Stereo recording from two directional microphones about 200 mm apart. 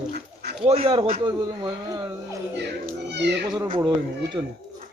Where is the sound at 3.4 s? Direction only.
20° right (ahead or behind).